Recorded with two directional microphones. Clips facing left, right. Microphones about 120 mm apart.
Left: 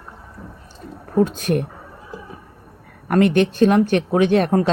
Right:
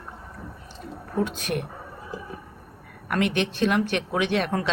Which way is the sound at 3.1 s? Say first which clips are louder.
Left 9 dB; 40° left (ahead or behind).